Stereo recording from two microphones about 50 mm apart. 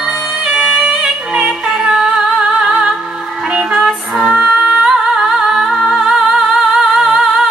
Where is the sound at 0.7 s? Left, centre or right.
Right.